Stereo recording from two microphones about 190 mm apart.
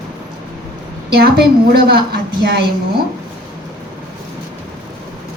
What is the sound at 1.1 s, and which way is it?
Speech, 55° right (ahead or behind).